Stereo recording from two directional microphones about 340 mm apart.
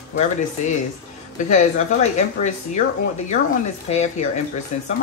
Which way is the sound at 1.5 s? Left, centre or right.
Left.